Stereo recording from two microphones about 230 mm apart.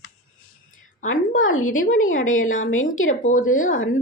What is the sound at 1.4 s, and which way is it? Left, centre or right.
Speech, left.